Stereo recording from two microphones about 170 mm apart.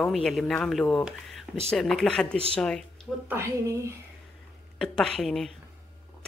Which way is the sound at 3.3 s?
15° right (ahead or behind).